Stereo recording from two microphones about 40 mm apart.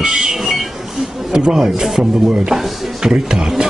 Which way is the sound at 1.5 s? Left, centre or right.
Centre.